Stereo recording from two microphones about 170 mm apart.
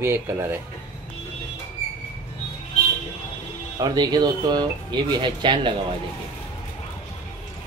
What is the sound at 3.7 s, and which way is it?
Speech, 25° right (ahead or behind).